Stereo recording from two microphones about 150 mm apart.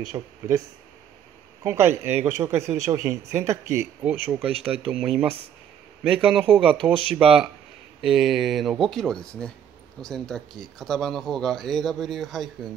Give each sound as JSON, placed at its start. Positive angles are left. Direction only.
{"t": 0.1, "sound": "speech", "side_deg": -30}
{"t": 1.6, "sound": "speech", "side_deg": -15}